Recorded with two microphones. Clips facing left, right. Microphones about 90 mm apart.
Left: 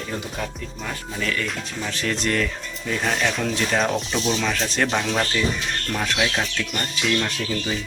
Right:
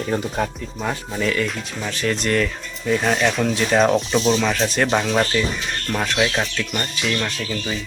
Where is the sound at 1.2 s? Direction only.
10° right (ahead or behind).